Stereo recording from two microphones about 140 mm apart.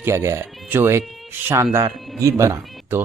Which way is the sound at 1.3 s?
15° right (ahead or behind).